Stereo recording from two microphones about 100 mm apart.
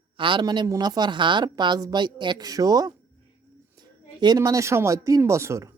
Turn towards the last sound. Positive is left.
turn(degrees=-30)  # may be behind; listen again after turning